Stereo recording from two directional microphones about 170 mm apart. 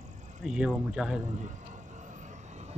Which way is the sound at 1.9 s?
45° right (ahead or behind).